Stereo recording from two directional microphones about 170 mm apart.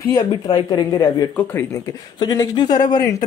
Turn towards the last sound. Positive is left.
turn(degrees=25)  # may be behind; listen again after turning